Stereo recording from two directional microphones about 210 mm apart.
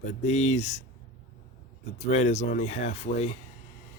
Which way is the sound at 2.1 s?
30° left (ahead or behind).